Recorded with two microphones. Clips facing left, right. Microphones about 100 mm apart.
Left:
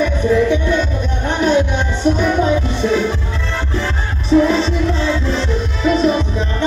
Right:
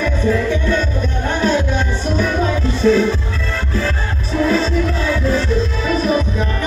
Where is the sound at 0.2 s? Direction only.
20° left (ahead or behind).